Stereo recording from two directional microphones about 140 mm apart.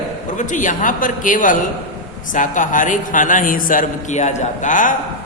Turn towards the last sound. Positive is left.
turn(degrees=65)  # may be behind; listen again after turning